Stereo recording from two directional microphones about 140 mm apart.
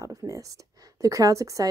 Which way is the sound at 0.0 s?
25° right (ahead or behind).